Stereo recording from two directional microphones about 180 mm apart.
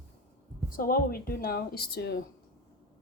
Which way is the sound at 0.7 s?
50° left (ahead or behind).